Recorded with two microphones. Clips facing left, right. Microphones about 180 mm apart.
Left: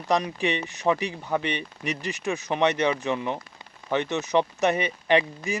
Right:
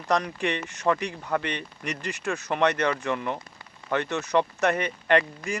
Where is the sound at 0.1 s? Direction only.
15° left (ahead or behind).